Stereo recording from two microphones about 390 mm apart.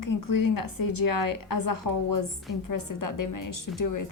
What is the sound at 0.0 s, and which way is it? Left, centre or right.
A woman's voice, left.